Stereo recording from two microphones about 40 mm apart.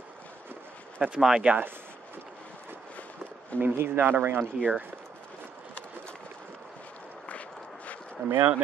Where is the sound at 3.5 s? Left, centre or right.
Right.